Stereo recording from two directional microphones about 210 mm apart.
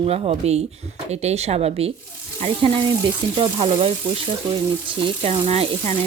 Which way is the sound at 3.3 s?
25° right (ahead or behind).